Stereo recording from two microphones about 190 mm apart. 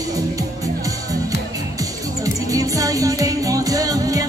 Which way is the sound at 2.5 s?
15° right (ahead or behind).